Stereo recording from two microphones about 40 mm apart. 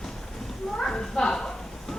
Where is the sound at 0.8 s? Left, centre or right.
Centre.